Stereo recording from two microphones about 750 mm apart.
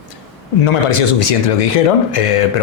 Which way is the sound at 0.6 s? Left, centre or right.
Left.